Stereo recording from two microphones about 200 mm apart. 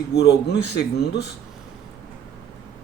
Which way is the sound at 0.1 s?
55° left (ahead or behind).